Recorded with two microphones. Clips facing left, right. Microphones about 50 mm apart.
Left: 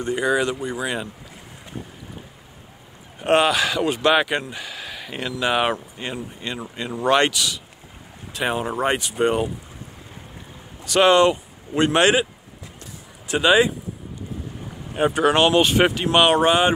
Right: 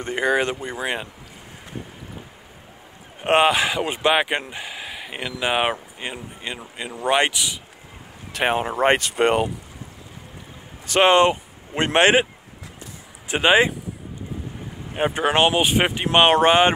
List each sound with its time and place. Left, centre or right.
0.0 s speech: right
3.2 s speech: right
8.3 s speech: right
8.9 s speech: right
10.9 s speech: right
13.3 s speech: right
15.0 s speech: right
15.5 s speech: centre; by 16.7 s right